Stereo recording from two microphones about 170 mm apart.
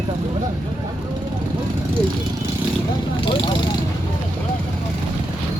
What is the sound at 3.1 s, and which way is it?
Speech, 30° left (ahead or behind).